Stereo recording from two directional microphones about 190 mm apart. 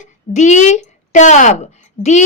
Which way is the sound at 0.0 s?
40° left (ahead or behind).